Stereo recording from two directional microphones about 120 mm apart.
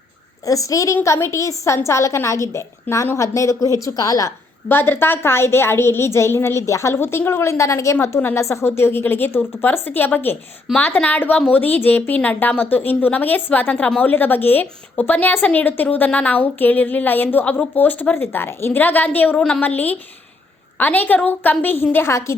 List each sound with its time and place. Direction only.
0.4 s a woman's voice: 30° left (ahead or behind)
4.7 s a woman's voice: 20° left (ahead or behind)